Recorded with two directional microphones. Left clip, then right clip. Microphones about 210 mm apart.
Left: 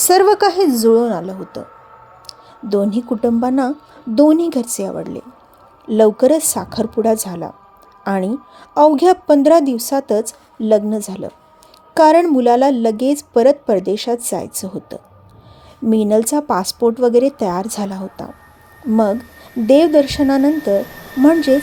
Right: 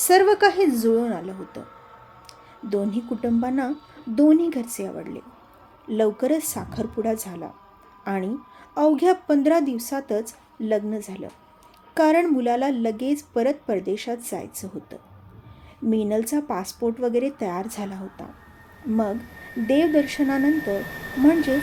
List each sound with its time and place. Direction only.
0.0 s a woman's voice: 30° left (ahead or behind)
2.6 s a woman's voice: 30° left (ahead or behind)
19.6 s a woman's voice: 35° left (ahead or behind)